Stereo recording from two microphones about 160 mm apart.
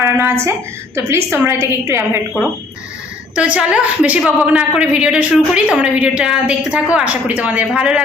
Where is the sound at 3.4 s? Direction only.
5° right (ahead or behind).